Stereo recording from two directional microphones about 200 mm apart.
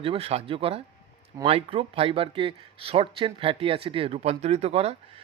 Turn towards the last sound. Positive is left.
turn(degrees=-30)  # may be behind; listen again after turning